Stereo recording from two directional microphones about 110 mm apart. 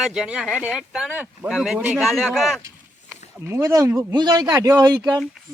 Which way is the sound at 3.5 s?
30° right (ahead or behind).